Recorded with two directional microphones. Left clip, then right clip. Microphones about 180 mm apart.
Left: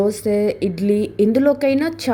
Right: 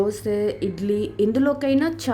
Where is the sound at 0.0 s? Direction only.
15° left (ahead or behind).